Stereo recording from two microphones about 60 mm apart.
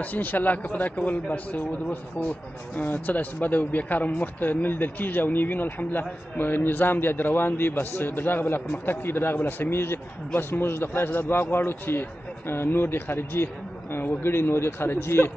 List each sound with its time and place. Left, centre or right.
0.0 s speech: left